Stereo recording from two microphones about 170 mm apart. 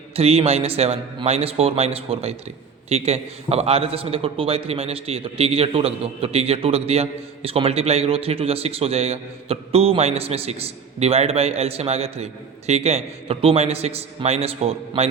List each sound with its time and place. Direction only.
0.2 s a man's voice: 35° right (ahead or behind)